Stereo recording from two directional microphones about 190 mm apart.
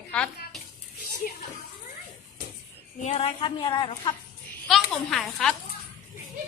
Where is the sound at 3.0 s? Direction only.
30° left (ahead or behind).